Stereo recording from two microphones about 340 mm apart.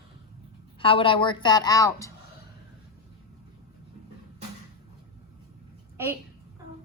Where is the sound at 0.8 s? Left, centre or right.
Centre.